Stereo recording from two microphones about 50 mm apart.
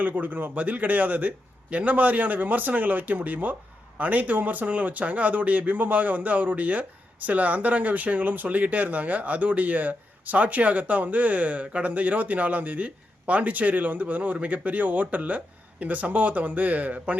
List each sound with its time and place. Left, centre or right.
0.0 s speech: right